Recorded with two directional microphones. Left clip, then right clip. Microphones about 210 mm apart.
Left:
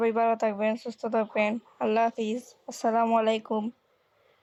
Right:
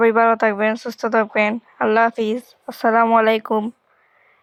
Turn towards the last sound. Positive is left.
turn(degrees=-15)  # may be behind; listen again after turning